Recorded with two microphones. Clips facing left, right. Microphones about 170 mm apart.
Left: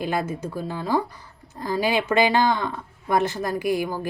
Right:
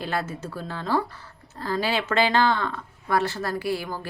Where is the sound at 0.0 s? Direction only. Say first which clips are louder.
Left 3 dB; 15° left (ahead or behind).